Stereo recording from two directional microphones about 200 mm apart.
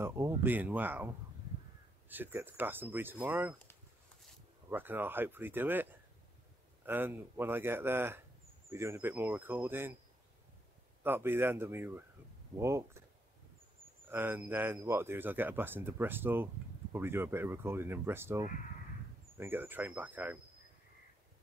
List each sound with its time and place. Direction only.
0.0 s speech: 15° right (ahead or behind)
4.6 s speech: 10° right (ahead or behind)
11.1 s speech: 10° right (ahead or behind)
14.0 s speech: 10° right (ahead or behind)